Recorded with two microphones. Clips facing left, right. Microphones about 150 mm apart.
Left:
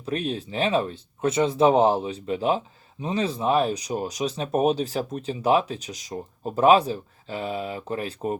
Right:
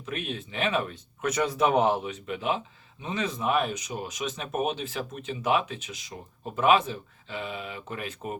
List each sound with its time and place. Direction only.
0.0 s speech: 35° left (ahead or behind)